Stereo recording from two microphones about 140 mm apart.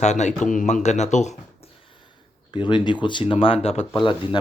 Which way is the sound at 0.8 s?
55° left (ahead or behind).